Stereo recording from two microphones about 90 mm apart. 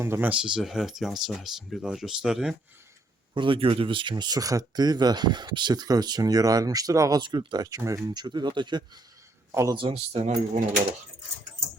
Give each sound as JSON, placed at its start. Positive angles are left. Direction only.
{"t": 0.0, "sound": "speech", "side_deg": -30}
{"t": 0.3, "sound": "speech", "side_deg": -10}
{"t": 3.3, "sound": "speech", "side_deg": -70}
{"t": 4.1, "sound": "speech", "side_deg": -45}
{"t": 7.2, "sound": "speech", "side_deg": -60}
{"t": 7.8, "sound": "speech", "side_deg": -35}
{"t": 8.1, "sound": "speech", "side_deg": -50}
{"t": 9.5, "sound": "speech", "side_deg": -40}
{"t": 9.7, "sound": "speech", "side_deg": -70}